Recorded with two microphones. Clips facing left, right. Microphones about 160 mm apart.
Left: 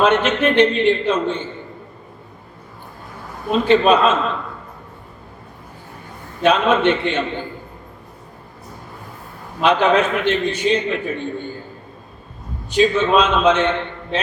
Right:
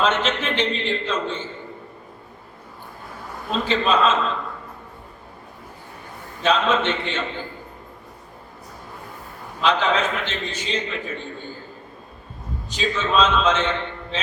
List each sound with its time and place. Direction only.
0.0 s a man's voice: 60° left (ahead or behind)
3.5 s a man's voice: 60° left (ahead or behind)
6.4 s a man's voice: 60° left (ahead or behind)
9.6 s a man's voice: 60° left (ahead or behind)
12.7 s a man's voice: 55° left (ahead or behind)